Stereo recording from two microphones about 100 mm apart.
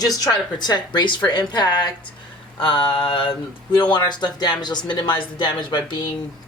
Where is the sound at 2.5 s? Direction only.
60° left (ahead or behind).